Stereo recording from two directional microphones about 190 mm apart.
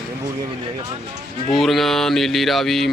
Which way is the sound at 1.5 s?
Centre (ahead or behind).